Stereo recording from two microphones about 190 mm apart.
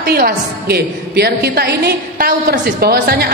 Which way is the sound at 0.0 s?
55° right (ahead or behind).